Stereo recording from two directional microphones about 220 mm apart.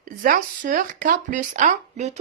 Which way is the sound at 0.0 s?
40° right (ahead or behind).